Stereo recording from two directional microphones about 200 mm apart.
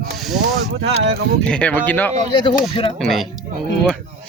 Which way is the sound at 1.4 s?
5° left (ahead or behind).